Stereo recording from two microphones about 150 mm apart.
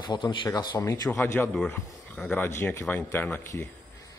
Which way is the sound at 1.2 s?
15° left (ahead or behind).